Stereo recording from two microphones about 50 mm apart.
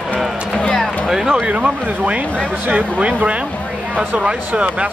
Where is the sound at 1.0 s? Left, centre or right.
Centre.